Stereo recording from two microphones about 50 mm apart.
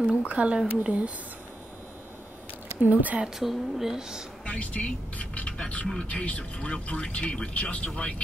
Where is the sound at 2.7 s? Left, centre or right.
Right.